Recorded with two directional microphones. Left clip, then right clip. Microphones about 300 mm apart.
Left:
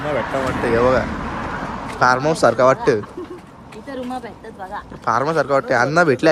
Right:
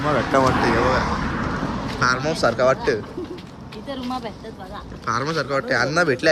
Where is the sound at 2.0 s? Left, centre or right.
Centre.